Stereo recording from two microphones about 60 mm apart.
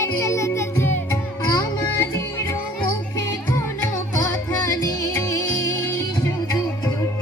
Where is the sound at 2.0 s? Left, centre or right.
Left.